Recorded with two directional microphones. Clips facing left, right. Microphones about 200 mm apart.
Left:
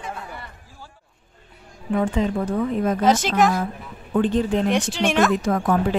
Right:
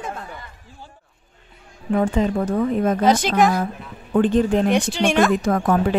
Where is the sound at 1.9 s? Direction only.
45° right (ahead or behind).